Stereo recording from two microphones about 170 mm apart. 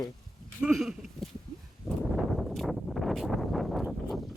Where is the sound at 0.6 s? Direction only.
5° right (ahead or behind).